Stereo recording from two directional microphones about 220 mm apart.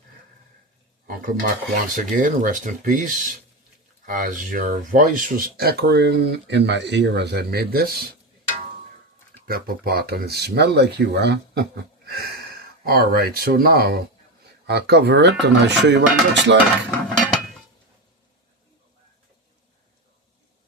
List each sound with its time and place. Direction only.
1.0 s a sound: 40° right (ahead or behind)
1.7 s speech: 35° right (ahead or behind)
9.5 s speech: 45° right (ahead or behind)